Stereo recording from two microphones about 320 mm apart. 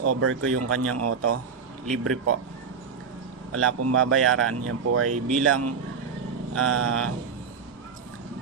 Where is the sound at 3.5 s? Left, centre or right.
Right.